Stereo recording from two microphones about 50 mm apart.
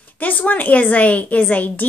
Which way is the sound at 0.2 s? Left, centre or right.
Left.